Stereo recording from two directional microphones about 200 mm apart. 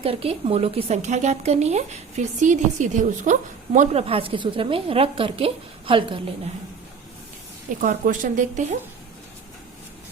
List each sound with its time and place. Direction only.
0.0 s speech: 30° right (ahead or behind)
7.8 s speech: 40° right (ahead or behind)